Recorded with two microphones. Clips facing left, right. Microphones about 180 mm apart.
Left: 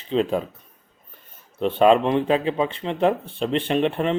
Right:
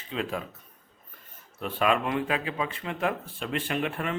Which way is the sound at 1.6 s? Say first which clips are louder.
Left 10 dB; 30° left (ahead or behind).